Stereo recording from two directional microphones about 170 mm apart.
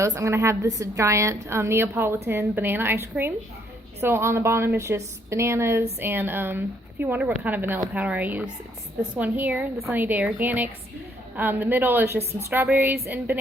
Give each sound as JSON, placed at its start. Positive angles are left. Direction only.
{"t": 0.0, "sound": "a woman's voice", "side_deg": -15}